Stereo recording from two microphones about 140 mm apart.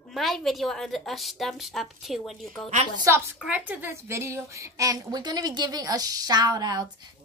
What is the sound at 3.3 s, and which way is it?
A woman's voice, 10° right (ahead or behind).